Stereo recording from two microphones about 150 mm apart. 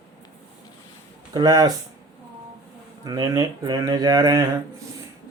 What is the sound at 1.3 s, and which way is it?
Speech, 25° right (ahead or behind).